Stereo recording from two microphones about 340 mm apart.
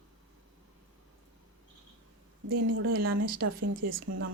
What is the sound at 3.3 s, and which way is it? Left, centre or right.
Speech, right.